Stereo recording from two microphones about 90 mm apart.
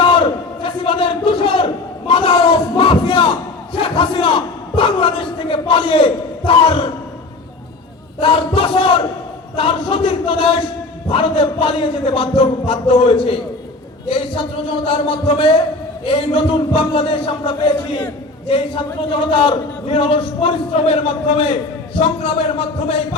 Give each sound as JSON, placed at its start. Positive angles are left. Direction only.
{"t": 0.0, "sound": "crowd", "side_deg": 70}
{"t": 2.0, "sound": "speech", "side_deg": 75}
{"t": 8.2, "sound": "a man's voice", "side_deg": 75}
{"t": 14.7, "sound": "a man's voice", "side_deg": 80}